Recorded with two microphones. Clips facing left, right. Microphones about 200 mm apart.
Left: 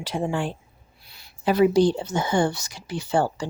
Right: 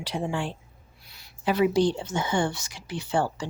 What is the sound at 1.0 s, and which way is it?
A woman's voice, 30° left (ahead or behind).